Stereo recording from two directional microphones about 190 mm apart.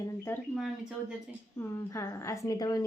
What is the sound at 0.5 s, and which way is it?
Speech, 5° right (ahead or behind).